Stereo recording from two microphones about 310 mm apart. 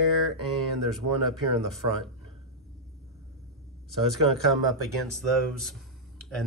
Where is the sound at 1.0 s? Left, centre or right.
Right.